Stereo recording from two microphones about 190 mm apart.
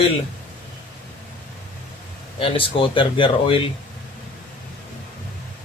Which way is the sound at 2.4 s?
30° left (ahead or behind).